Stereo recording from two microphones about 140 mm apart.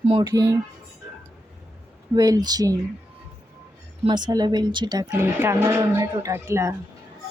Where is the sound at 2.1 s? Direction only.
25° right (ahead or behind).